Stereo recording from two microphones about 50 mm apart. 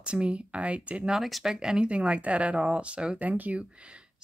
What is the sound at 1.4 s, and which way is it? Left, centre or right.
Speech, centre.